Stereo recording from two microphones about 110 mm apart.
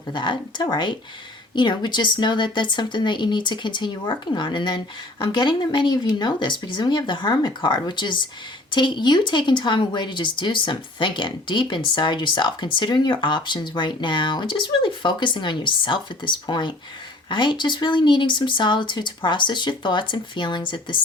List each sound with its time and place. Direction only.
0.1 s speech: 45° left (ahead or behind)